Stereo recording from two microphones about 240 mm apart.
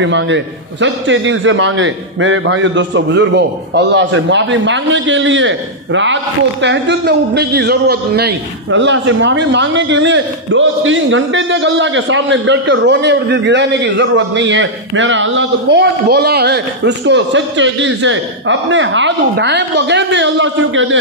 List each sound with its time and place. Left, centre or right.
0.0 s a man's voice: right